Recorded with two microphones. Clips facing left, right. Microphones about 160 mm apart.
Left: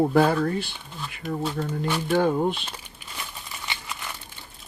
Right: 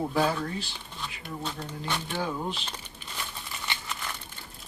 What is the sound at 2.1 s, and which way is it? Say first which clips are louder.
Speech: left 13 dB; 50° left (ahead or behind).